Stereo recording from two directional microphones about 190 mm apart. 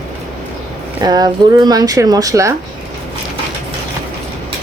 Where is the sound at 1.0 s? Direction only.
20° right (ahead or behind).